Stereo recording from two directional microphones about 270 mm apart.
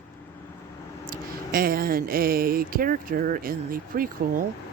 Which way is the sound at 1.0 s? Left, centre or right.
Right.